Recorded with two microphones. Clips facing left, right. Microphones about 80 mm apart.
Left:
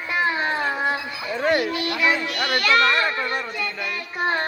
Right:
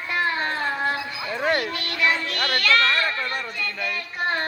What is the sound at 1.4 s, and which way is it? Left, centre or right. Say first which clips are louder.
A child's voice: left 3 dB; centre.